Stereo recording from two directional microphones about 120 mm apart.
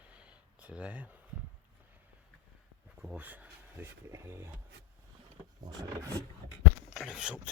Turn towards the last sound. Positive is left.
turn(degrees=-5)  # may be behind; listen again after turning